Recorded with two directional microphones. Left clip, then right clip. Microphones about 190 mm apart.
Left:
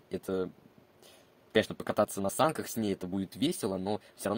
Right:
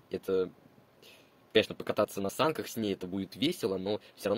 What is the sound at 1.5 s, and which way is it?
Speech, 50° left (ahead or behind).